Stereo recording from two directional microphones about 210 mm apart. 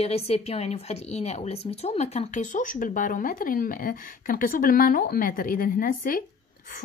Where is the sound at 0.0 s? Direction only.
30° left (ahead or behind).